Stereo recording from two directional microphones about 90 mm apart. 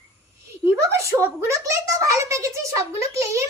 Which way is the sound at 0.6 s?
30° right (ahead or behind).